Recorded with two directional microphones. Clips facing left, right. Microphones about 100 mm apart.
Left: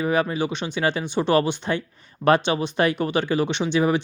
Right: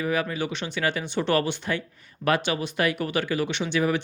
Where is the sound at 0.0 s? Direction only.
30° left (ahead or behind).